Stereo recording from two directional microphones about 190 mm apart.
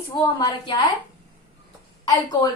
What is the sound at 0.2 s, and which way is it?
Speech, 20° left (ahead or behind).